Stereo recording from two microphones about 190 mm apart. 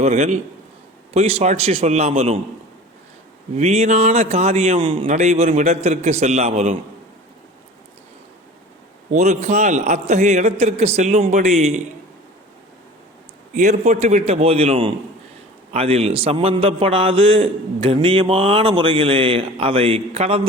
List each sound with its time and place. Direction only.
0.0 s a man's voice: 35° right (ahead or behind)
3.5 s a man's voice: 35° right (ahead or behind)
5.0 s a man's voice: 40° right (ahead or behind)
9.1 s a man's voice: 35° right (ahead or behind)
13.5 s a man's voice: 40° right (ahead or behind)